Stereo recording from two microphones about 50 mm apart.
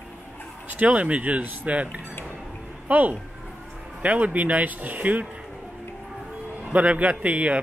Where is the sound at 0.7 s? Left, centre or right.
Right.